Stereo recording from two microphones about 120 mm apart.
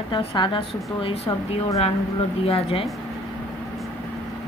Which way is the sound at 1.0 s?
55° left (ahead or behind).